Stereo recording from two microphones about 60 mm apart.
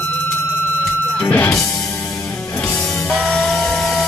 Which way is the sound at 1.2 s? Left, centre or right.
Left.